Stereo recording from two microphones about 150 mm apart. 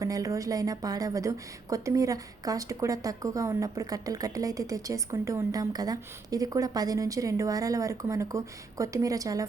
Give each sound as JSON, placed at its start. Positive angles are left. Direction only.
{"t": 0.0, "sound": "a woman's voice", "side_deg": -20}